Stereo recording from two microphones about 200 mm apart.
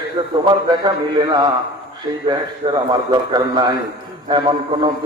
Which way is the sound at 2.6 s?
25° right (ahead or behind).